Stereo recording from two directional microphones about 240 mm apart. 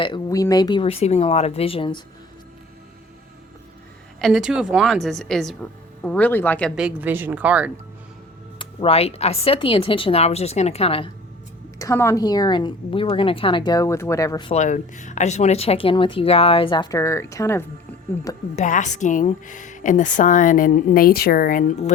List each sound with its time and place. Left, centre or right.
0.0 s a woman's voice: centre
4.2 s a woman's voice: centre
8.5 s a woman's voice: left
11.8 s a woman's voice: centre
18.5 s a woman's voice: left